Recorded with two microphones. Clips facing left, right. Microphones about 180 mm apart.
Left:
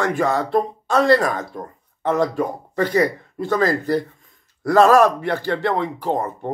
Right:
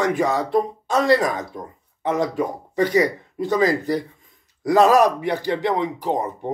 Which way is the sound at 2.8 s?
15° right (ahead or behind).